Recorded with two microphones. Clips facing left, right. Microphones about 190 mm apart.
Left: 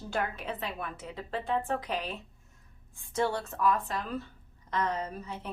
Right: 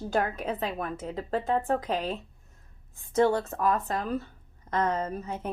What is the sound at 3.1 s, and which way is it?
A woman's voice, 45° right (ahead or behind).